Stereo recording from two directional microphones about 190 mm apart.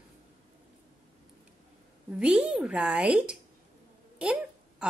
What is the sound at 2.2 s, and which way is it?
Speech, 5° right (ahead or behind).